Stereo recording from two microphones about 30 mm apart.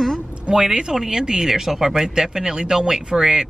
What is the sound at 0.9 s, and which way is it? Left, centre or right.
Speech, centre.